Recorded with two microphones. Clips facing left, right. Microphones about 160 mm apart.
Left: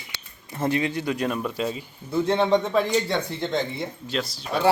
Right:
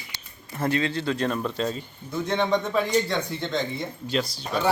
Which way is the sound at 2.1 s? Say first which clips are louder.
Left 4 dB; 30° left (ahead or behind).